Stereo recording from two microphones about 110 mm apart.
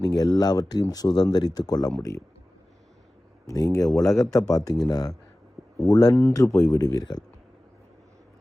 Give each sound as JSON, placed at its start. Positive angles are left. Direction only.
{"t": 0.0, "sound": "speech", "side_deg": 35}
{"t": 3.5, "sound": "speech", "side_deg": 35}